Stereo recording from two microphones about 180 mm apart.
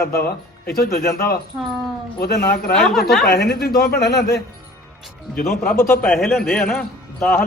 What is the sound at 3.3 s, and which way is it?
Speech, 60° left (ahead or behind).